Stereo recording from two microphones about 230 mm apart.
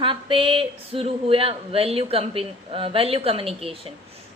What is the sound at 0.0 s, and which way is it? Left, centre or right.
A woman's voice, right.